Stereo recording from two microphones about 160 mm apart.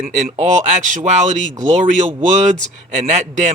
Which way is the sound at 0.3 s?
50° right (ahead or behind).